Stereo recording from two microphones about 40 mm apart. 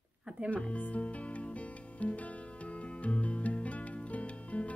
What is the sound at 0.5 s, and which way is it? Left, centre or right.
Music, left.